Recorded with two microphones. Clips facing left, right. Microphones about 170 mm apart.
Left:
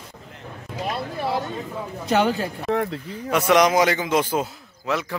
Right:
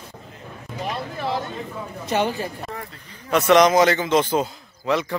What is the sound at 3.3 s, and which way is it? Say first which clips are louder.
A man's voice: right 2 dB; 10° left (ahead or behind).